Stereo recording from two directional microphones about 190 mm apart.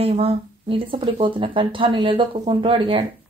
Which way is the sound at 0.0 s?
30° right (ahead or behind).